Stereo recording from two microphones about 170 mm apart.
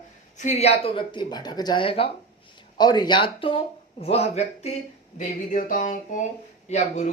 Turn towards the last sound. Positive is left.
turn(degrees=45)  # may be behind; listen again after turning